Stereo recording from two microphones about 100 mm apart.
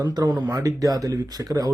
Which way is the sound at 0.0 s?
40° right (ahead or behind).